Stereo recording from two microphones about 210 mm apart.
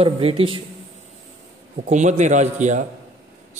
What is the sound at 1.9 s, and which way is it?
Speech, 35° right (ahead or behind).